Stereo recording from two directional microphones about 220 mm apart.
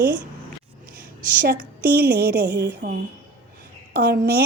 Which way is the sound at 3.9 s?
45° right (ahead or behind).